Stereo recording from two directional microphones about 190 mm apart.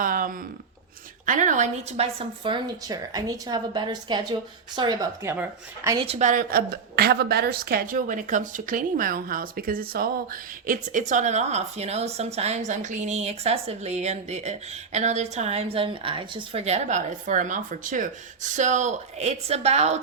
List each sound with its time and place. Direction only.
0.0 s a sound: 45° right (ahead or behind)
1.2 s a woman's voice: 40° right (ahead or behind); by 6.1 s 15° right (ahead or behind)
6.1 s a woman's voice: 40° right (ahead or behind)